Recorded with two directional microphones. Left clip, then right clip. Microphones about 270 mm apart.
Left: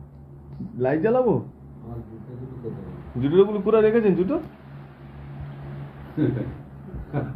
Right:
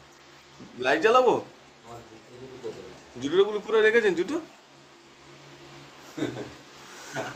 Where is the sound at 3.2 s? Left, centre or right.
Centre.